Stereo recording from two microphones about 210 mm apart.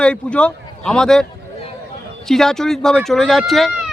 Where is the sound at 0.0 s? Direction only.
5° left (ahead or behind).